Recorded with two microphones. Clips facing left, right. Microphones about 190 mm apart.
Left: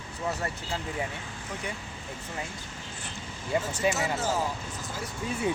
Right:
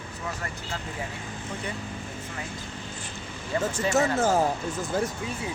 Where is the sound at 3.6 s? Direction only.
50° right (ahead or behind).